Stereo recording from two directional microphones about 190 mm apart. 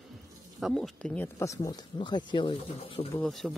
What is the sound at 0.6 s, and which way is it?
Speech, 5° left (ahead or behind).